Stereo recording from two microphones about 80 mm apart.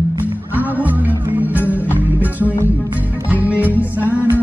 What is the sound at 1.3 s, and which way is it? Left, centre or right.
Music, right.